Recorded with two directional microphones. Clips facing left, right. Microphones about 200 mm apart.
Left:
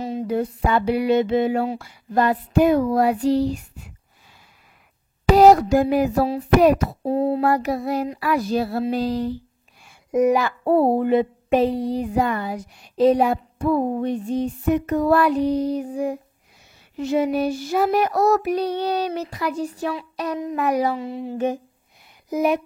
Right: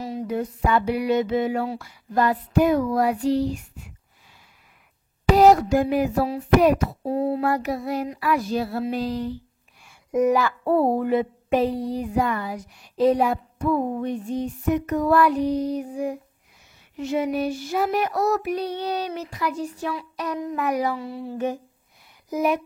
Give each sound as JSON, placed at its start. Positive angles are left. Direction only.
{"t": 0.0, "sound": "child singing", "side_deg": 25}
{"t": 5.3, "sound": "child singing", "side_deg": 35}
{"t": 10.1, "sound": "child singing", "side_deg": 20}